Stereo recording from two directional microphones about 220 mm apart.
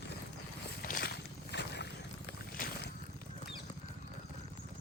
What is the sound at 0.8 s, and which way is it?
Boat, 40° left (ahead or behind).